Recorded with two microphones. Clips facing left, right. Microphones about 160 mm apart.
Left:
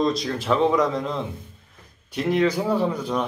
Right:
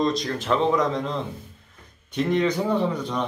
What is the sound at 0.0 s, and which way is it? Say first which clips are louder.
A man's voice: left 1 dB; 5° left (ahead or behind).